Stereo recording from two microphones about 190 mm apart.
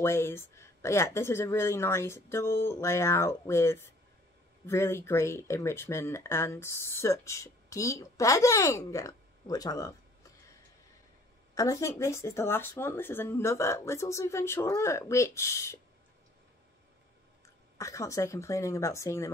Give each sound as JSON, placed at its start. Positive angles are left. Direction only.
{"t": 0.0, "sound": "speech", "side_deg": 15}
{"t": 11.5, "sound": "speech", "side_deg": 15}
{"t": 17.7, "sound": "speech", "side_deg": 15}